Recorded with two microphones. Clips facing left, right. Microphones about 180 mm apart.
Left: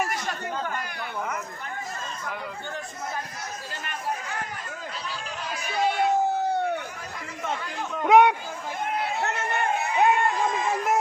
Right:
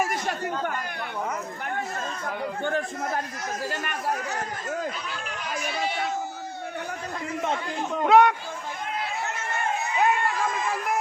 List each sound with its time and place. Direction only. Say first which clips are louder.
2.2 s speech: right 8 dB; 55° right (ahead or behind)
8.0 s speech: left 1 dB; 15° left (ahead or behind)
9.2 s crowd: left 4 dB; 65° left (ahead or behind)
10.0 s a sound: left 2 dB; 20° left (ahead or behind)